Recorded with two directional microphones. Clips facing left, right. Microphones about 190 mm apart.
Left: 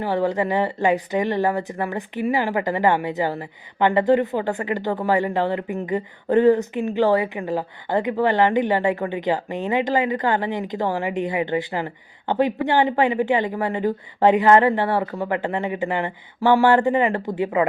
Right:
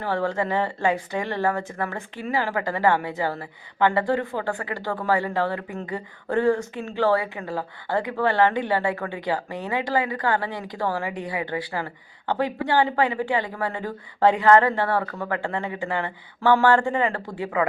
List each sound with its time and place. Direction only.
0.0 s a woman's voice: 15° left (ahead or behind)